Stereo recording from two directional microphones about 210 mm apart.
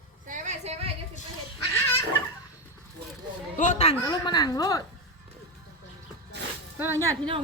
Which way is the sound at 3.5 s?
35° left (ahead or behind).